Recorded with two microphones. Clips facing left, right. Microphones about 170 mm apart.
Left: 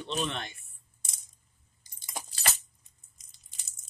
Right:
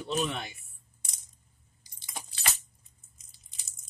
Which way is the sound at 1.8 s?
45° left (ahead or behind).